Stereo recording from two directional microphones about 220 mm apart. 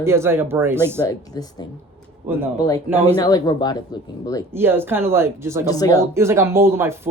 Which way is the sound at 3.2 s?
15° left (ahead or behind).